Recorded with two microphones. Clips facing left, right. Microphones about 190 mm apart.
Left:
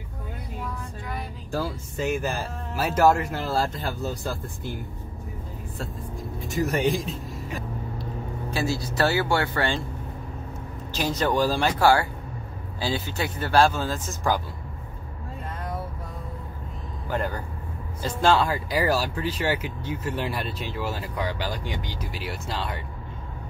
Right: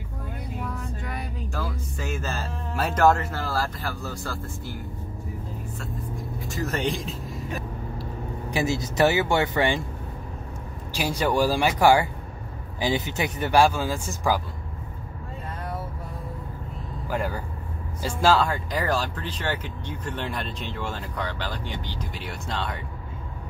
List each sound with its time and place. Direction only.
1.5 s music: 30° left (ahead or behind)
2.0 s speech: 15° left (ahead or behind)
2.7 s speech: 5° left (ahead or behind)
3.1 s speech: 15° left (ahead or behind)
6.5 s speech: 15° left (ahead or behind)
6.9 s speech: centre (ahead or behind)
8.5 s speech: 20° right (ahead or behind)
10.9 s speech: 10° right (ahead or behind)
17.1 s speech: 5° right (ahead or behind)